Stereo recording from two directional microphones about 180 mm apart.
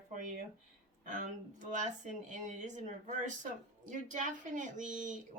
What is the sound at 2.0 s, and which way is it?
Speech, 45° right (ahead or behind).